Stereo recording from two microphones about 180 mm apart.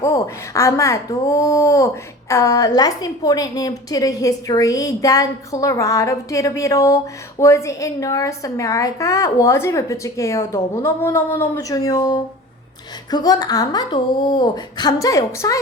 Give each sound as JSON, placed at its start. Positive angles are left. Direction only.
{"t": 0.0, "sound": "a woman's voice", "side_deg": 20}